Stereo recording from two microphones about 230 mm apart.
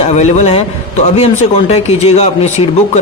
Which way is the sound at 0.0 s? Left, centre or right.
Left.